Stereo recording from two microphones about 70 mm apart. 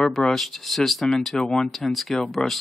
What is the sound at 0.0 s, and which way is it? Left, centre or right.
Speech, centre.